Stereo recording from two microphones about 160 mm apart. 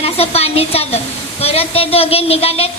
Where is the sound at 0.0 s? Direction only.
40° left (ahead or behind).